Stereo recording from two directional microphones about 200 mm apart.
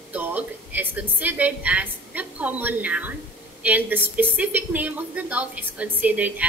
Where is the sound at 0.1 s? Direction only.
10° right (ahead or behind).